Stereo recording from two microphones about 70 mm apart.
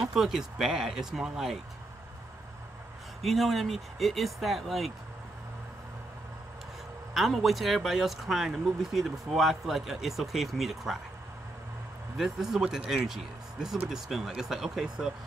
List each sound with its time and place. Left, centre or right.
0.0 s speech: centre
3.2 s speech: centre
7.2 s speech: centre
12.2 s speech: centre